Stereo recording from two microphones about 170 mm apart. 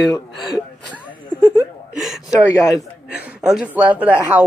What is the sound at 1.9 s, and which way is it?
Gasp, centre (ahead or behind).